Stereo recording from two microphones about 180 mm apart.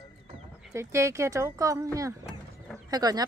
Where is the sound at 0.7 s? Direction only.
15° right (ahead or behind).